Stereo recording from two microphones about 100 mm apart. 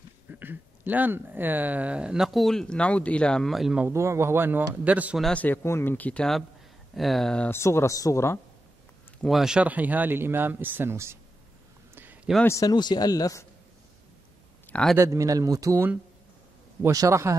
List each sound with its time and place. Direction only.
0.3 s speech: 20° right (ahead or behind); by 3.8 s centre (ahead or behind)
3.9 s speech: 30° right (ahead or behind)
5.3 s speech: 15° left (ahead or behind)
7.0 s speech: centre (ahead or behind)
7.4 s speech: 25° left (ahead or behind)
9.2 s speech: 5° right (ahead or behind); by 11.1 s 25° right (ahead or behind)
11.9 s a sound: 20° right (ahead or behind)
12.4 s speech: 35° left (ahead or behind)
12.7 s speech: 45° left (ahead or behind)
15.0 s speech: 30° right (ahead or behind)
16.9 s speech: 30° right (ahead or behind)